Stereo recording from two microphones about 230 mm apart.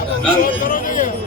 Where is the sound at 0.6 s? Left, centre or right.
Left.